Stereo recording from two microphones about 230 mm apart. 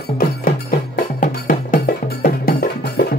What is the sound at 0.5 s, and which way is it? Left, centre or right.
Music, left.